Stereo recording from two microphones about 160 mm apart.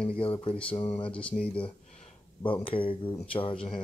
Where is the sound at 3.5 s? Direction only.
5° left (ahead or behind).